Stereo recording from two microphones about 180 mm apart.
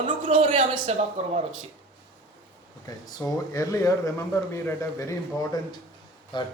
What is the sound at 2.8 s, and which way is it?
A man's voice, 20° left (ahead or behind).